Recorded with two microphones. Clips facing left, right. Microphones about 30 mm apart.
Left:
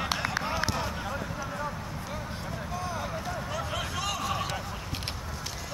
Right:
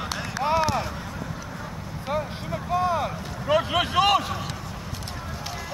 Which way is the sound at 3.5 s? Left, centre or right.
Right.